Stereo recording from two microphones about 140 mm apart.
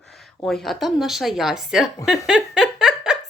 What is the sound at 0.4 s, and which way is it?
Speech, centre (ahead or behind).